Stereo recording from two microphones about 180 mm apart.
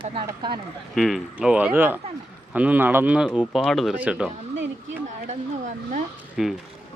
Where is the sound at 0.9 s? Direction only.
Centre (ahead or behind).